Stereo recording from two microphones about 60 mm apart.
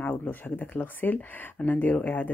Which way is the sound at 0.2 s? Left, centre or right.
Left.